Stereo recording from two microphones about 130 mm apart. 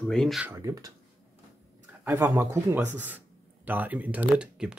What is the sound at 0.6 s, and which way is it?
Speech, 25° right (ahead or behind).